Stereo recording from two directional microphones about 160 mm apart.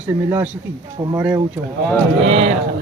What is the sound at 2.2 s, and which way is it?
Speech, 40° right (ahead or behind).